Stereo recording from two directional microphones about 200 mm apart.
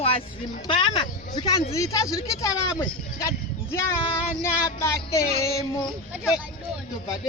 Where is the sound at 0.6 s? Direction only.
25° left (ahead or behind).